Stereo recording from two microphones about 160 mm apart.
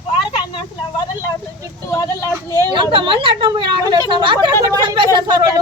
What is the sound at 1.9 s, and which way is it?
Speech, 20° left (ahead or behind).